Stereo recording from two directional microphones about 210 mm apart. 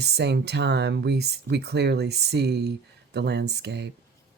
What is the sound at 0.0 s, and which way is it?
Speech, 55° right (ahead or behind).